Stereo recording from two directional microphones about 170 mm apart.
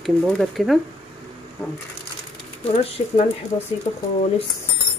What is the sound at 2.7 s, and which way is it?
Speech, 35° left (ahead or behind).